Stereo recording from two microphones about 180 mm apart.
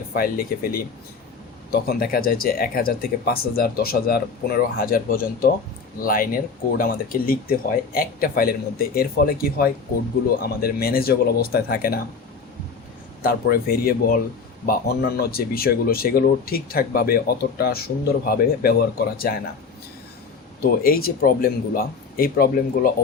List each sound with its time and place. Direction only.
0.1 s speech: 55° left (ahead or behind)
13.2 s speech: 55° left (ahead or behind)
20.6 s speech: 55° left (ahead or behind)